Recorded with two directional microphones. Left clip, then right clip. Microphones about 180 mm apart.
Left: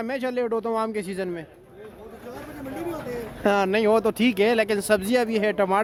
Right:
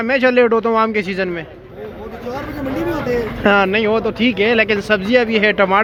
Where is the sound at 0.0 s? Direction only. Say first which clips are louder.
Right 13 dB; 20° left (ahead or behind).